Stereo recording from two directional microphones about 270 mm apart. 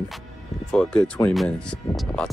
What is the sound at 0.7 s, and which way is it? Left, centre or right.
Speech, centre.